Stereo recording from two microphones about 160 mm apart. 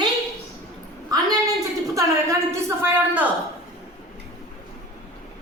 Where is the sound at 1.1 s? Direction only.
25° right (ahead or behind).